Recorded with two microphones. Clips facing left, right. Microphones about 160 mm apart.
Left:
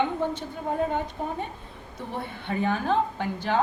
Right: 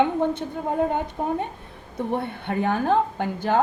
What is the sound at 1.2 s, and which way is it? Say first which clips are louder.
A woman's voice: right 5 dB; 60° right (ahead or behind).